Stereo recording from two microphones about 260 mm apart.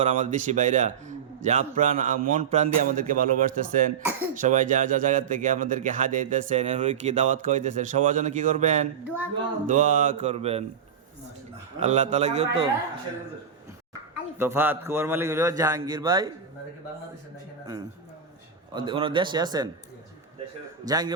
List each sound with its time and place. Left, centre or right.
0.0 s a man's voice: right
9.0 s a man's voice: centre
9.6 s a man's voice: right
11.8 s a man's voice: right
14.3 s a man's voice: centre
18.7 s a man's voice: centre
20.8 s a man's voice: centre